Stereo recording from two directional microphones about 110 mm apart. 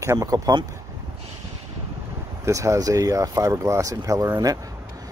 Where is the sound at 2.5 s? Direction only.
30° right (ahead or behind).